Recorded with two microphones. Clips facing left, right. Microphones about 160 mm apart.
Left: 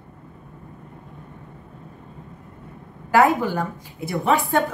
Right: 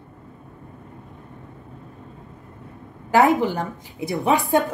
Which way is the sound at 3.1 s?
20° right (ahead or behind).